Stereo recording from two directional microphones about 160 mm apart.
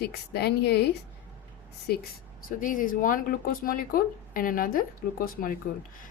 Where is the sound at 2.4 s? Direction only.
55° left (ahead or behind).